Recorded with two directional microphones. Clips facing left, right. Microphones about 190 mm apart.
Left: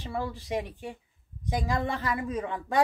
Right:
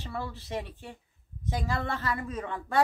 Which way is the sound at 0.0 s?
15° left (ahead or behind).